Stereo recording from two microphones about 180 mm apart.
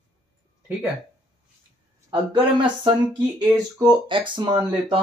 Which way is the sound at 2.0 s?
25° right (ahead or behind).